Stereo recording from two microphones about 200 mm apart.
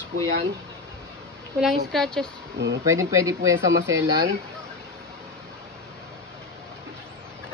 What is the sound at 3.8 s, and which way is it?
Speech, 65° right (ahead or behind).